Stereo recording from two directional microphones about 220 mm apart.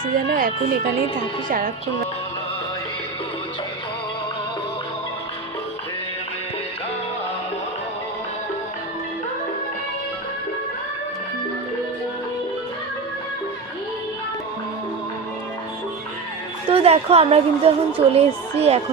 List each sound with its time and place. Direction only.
0.1 s speech: 40° right (ahead or behind)
16.6 s a woman's voice: 25° right (ahead or behind)